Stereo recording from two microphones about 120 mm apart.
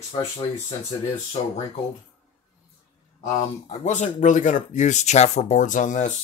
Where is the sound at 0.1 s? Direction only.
45° left (ahead or behind).